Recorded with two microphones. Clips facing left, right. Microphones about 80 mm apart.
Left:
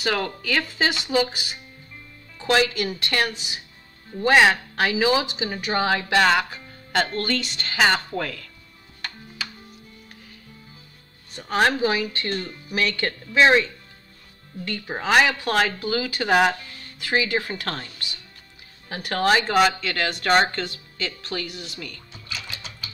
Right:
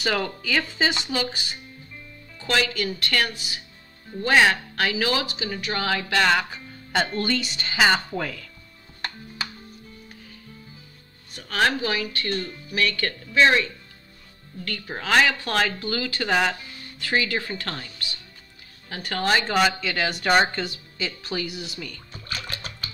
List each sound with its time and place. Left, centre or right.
0.0 s speech: centre
6.2 s speech: centre
11.3 s speech: centre
17.7 s speech: centre
22.1 s sewing machine: right